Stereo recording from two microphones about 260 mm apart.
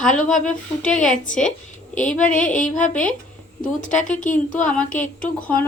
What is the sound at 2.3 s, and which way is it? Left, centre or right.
Music, left.